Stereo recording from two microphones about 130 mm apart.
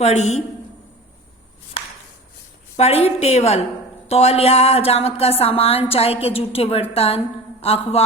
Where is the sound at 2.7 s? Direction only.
50° left (ahead or behind).